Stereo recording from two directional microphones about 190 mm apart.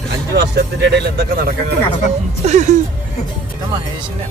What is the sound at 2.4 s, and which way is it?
Speech, 35° right (ahead or behind).